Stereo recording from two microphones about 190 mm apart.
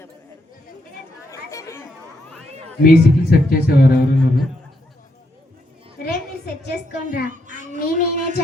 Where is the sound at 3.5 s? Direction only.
50° left (ahead or behind).